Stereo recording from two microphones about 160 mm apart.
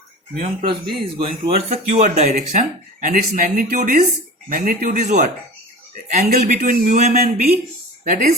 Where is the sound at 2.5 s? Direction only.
55° right (ahead or behind).